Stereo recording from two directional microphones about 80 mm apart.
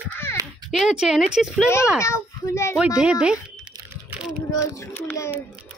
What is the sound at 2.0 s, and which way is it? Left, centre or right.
Speech, left.